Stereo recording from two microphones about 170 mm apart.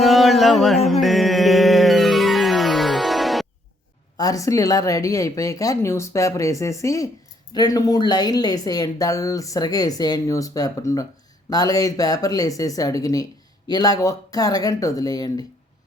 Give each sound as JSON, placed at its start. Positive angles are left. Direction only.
{"t": 0.0, "sound": "a sound", "side_deg": 0}
{"t": 0.9, "sound": "music", "side_deg": 0}
{"t": 4.2, "sound": "speech", "side_deg": 20}